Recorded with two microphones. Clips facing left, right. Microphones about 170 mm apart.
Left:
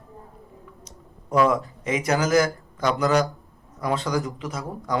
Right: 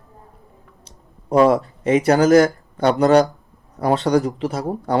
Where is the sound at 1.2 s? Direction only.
35° right (ahead or behind).